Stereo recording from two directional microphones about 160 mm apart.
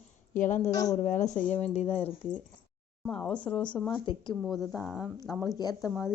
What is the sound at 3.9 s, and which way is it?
Speech, 30° left (ahead or behind).